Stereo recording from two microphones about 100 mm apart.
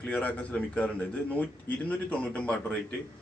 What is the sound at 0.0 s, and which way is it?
Speech, 15° left (ahead or behind).